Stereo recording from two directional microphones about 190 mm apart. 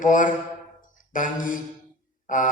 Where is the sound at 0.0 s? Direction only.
45° left (ahead or behind).